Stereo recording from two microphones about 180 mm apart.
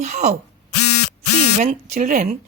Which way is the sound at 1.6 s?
40° right (ahead or behind).